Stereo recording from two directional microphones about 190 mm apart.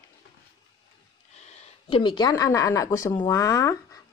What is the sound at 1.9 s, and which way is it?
Speech, 25° left (ahead or behind).